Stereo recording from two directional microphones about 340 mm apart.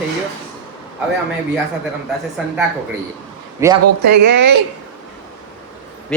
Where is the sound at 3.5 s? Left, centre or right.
Centre.